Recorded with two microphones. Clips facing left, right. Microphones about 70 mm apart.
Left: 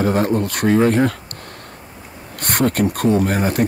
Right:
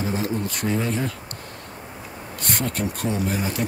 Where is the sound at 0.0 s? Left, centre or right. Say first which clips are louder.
Left 8 dB; left.